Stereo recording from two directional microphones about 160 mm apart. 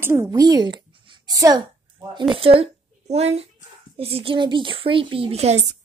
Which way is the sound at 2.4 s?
35° right (ahead or behind).